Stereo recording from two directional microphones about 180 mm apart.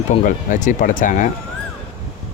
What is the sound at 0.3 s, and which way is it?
Speech, 45° left (ahead or behind).